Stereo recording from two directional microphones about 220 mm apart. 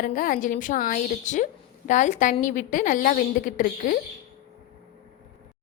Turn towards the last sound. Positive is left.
turn(degrees=40)  # may be behind; listen again after turning